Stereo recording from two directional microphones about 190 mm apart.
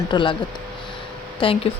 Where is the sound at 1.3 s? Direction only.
30° left (ahead or behind).